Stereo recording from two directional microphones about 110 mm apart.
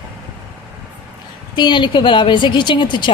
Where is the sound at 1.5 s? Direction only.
45° left (ahead or behind).